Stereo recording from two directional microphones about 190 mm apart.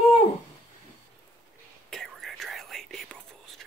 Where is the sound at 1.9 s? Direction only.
Centre (ahead or behind).